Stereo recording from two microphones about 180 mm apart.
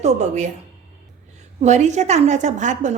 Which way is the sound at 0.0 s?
40° right (ahead or behind).